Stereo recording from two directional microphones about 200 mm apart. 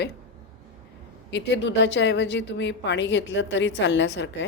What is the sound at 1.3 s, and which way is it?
A woman's voice, 60° left (ahead or behind).